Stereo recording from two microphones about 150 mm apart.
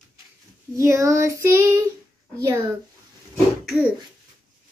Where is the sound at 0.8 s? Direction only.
20° right (ahead or behind).